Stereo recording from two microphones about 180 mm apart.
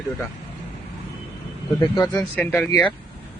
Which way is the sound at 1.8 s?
20° left (ahead or behind).